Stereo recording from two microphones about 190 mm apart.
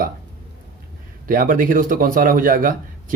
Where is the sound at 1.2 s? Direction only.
45° right (ahead or behind).